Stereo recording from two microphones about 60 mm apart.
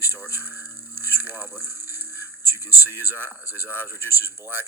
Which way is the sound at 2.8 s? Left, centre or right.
Right.